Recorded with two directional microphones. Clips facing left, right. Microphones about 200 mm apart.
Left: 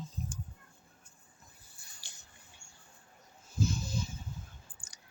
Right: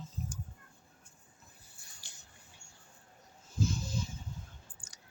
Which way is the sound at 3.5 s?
10° left (ahead or behind).